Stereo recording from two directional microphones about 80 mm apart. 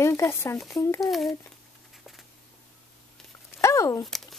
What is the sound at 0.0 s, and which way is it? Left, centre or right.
A woman's voice, left.